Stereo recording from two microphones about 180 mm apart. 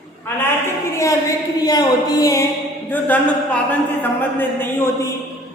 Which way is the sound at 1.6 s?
20° left (ahead or behind).